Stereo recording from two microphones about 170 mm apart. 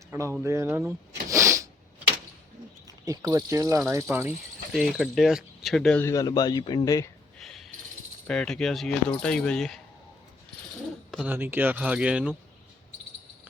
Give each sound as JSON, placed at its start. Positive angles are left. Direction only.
{"t": 0.1, "sound": "speech", "side_deg": -15}
{"t": 2.8, "sound": "speech", "side_deg": -20}
{"t": 4.7, "sound": "speech", "side_deg": 0}
{"t": 8.3, "sound": "speech", "side_deg": 5}
{"t": 11.3, "sound": "speech", "side_deg": -10}